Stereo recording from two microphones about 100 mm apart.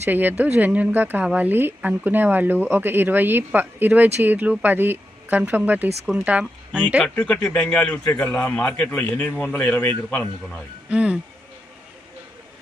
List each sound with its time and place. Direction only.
0.0 s speech: 20° right (ahead or behind)
7.5 s a man's voice: 15° left (ahead or behind)
10.8 s speech: 15° right (ahead or behind)